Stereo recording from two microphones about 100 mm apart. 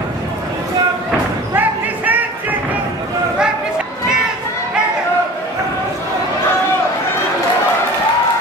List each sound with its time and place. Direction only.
1.5 s basketball bounce: 20° right (ahead or behind)